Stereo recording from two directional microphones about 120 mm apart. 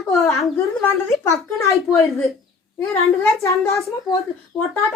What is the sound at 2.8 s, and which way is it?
A child's voice, 20° left (ahead or behind).